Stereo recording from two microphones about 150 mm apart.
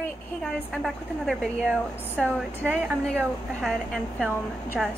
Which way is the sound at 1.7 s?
10° right (ahead or behind).